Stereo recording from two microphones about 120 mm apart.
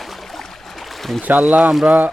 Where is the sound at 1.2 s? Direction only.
15° right (ahead or behind).